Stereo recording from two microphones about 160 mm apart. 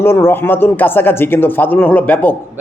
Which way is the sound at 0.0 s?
15° left (ahead or behind).